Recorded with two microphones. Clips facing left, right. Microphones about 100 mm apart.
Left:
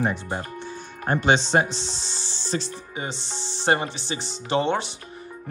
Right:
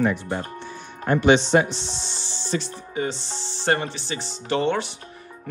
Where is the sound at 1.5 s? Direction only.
35° left (ahead or behind).